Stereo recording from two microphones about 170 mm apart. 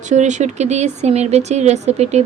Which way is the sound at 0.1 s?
45° right (ahead or behind).